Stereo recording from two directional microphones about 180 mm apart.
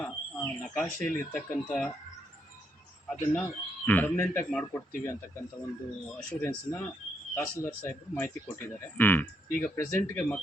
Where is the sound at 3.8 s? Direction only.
10° left (ahead or behind).